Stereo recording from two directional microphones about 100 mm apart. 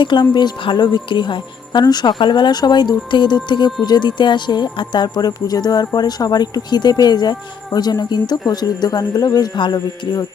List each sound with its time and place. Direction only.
0.0 s speech: 50° left (ahead or behind)